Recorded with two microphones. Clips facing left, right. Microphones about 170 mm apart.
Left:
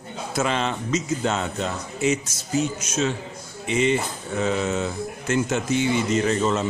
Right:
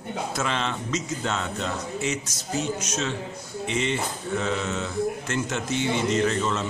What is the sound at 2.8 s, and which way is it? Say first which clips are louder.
A man's voice: left 4 dB; 5° left (ahead or behind).